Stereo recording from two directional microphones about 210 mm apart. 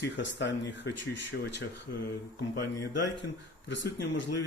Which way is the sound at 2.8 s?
60° left (ahead or behind).